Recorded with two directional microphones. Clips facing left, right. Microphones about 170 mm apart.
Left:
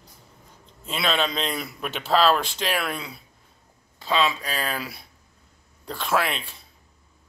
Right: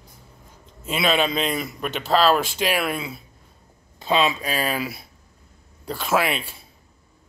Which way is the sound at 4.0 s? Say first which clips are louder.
Right 3 dB; 15° right (ahead or behind).